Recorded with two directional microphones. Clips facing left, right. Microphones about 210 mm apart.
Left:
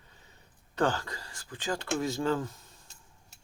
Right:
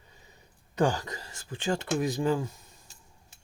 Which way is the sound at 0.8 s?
15° right (ahead or behind).